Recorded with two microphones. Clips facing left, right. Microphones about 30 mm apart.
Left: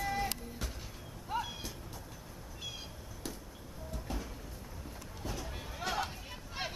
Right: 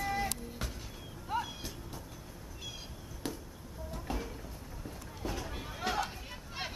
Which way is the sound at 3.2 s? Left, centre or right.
Right.